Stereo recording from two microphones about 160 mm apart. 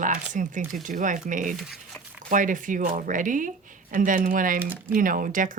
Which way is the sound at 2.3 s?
55° right (ahead or behind).